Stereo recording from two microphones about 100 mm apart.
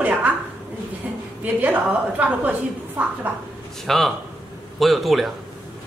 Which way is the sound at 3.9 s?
5° left (ahead or behind).